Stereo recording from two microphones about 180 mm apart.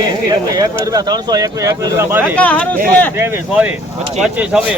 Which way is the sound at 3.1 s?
10° right (ahead or behind).